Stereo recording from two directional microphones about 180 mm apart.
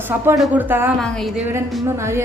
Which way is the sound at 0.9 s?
5° left (ahead or behind).